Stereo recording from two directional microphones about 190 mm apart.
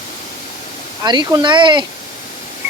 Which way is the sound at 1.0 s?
20° right (ahead or behind).